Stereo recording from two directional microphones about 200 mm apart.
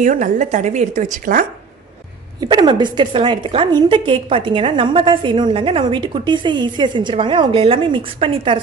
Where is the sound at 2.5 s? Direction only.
20° right (ahead or behind).